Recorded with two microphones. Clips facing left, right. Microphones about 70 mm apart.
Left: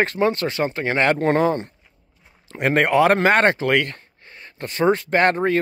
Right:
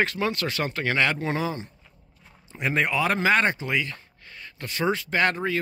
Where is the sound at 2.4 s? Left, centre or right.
Left.